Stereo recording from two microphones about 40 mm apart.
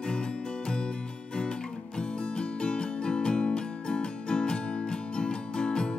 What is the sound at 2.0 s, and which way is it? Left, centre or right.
Music, left.